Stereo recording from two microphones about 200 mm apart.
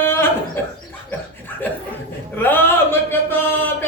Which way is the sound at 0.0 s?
10° left (ahead or behind).